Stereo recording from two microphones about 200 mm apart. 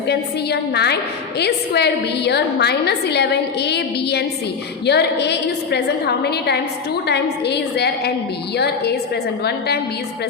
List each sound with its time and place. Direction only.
0.1 s a woman's voice: 55° left (ahead or behind)